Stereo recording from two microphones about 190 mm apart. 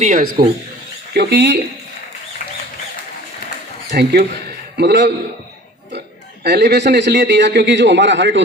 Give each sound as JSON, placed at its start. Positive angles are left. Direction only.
{"t": 0.0, "sound": "speech", "side_deg": -45}
{"t": 1.1, "sound": "a man's voice", "side_deg": -60}
{"t": 3.9, "sound": "a man's voice", "side_deg": -55}
{"t": 6.4, "sound": "a man's voice", "side_deg": -60}